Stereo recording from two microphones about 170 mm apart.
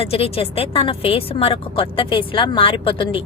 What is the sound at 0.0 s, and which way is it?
Speech, 35° left (ahead or behind).